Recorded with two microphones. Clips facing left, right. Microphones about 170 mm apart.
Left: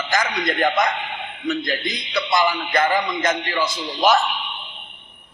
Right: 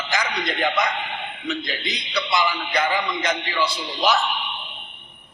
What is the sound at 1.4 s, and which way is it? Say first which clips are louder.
A man's voice: left 6 dB; 45° left (ahead or behind).